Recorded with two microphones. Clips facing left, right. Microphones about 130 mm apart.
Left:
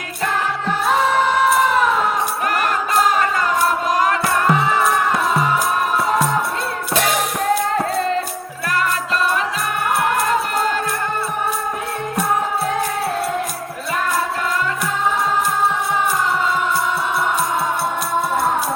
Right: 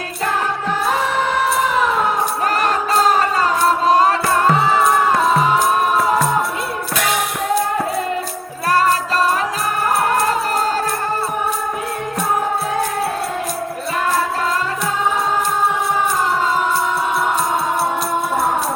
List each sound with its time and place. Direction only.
3.8 s music: 30° right (ahead or behind)
8.6 s music: 30° right (ahead or behind)